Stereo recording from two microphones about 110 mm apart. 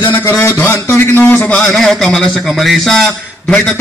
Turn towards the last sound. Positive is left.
turn(degrees=5)  # may be behind; listen again after turning